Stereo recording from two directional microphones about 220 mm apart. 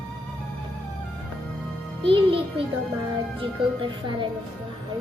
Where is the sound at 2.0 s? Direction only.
25° right (ahead or behind).